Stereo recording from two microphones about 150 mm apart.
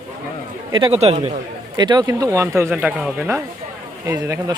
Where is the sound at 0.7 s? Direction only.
40° right (ahead or behind).